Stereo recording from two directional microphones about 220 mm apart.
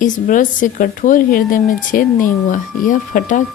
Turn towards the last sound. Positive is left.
turn(degrees=35)  # may be behind; listen again after turning